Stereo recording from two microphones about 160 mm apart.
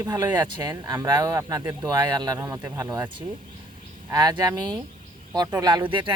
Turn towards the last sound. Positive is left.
turn(degrees=-30)  # may be behind; listen again after turning